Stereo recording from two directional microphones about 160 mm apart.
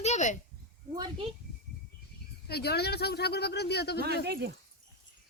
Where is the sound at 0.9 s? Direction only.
30° right (ahead or behind).